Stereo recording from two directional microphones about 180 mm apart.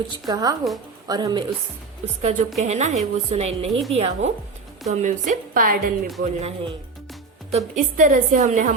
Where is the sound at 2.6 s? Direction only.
40° right (ahead or behind).